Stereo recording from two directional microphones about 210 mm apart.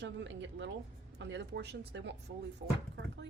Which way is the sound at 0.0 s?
55° right (ahead or behind).